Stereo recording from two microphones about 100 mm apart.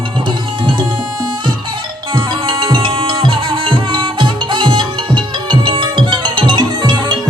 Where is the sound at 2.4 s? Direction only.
55° right (ahead or behind).